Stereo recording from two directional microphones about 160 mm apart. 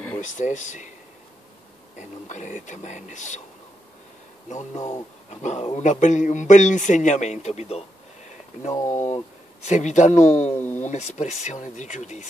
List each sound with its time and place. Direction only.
0.2 s speech: 50° left (ahead or behind)
2.0 s speech: 50° left (ahead or behind)
4.7 s speech: 25° left (ahead or behind)
5.3 s speech: 45° left (ahead or behind)
8.9 s speech: 45° left (ahead or behind)
10.5 s speech: 10° left (ahead or behind)
10.8 s speech: 45° left (ahead or behind)